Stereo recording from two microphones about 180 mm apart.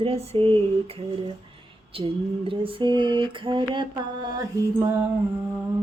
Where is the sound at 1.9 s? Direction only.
30° right (ahead or behind).